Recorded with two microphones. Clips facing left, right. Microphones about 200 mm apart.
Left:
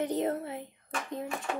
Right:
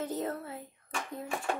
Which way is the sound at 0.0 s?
20° left (ahead or behind).